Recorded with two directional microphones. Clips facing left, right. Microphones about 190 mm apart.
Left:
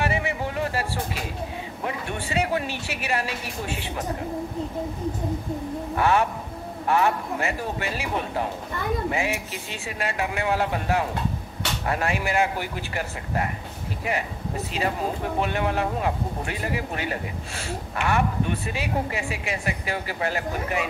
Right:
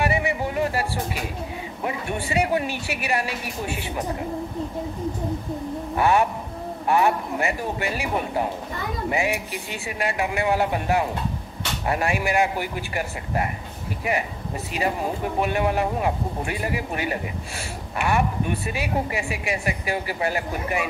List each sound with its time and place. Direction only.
0.0 s a sound: 15° right (ahead or behind)
1.9 s a woman's voice: 15° right (ahead or behind)
5.9 s a woman's voice: 15° right (ahead or behind)
15.4 s a woman's voice: 10° right (ahead or behind)